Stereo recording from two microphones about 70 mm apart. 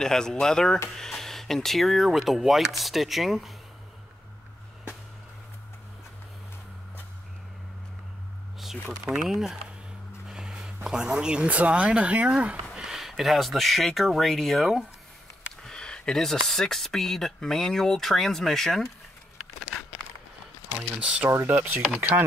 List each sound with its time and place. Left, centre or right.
0.0 s speech: centre
8.8 s speech: centre
12.7 s a sound: centre
13.1 s speech: centre
15.6 s speech: centre
21.0 s speech: centre
21.3 s speech: right